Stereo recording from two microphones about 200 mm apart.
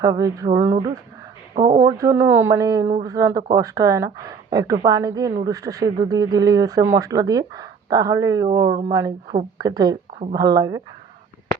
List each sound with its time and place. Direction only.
0.0 s speech: 20° right (ahead or behind)
1.5 s speech: 35° right (ahead or behind)
1.8 s a woman's voice: 15° right (ahead or behind)